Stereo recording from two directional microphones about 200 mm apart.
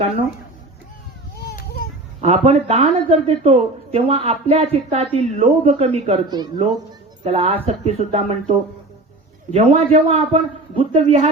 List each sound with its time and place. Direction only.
2.2 s speech: 35° right (ahead or behind)
6.2 s a woman's voice: 20° right (ahead or behind)
7.3 s speech: 30° right (ahead or behind)